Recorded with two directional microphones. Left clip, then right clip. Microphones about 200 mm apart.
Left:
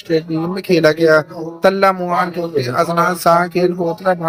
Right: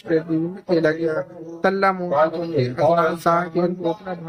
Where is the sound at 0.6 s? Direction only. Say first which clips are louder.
Left 9 dB; 20° left (ahead or behind).